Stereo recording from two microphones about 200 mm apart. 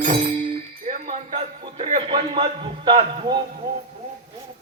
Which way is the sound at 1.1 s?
35° right (ahead or behind).